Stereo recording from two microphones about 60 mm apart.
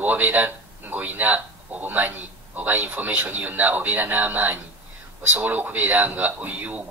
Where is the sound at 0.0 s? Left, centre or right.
Right.